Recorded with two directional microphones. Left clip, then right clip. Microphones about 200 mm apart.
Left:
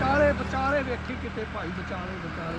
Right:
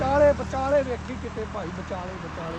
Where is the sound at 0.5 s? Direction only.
55° right (ahead or behind).